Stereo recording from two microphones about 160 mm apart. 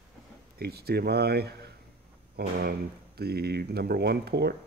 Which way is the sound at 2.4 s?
75° right (ahead or behind).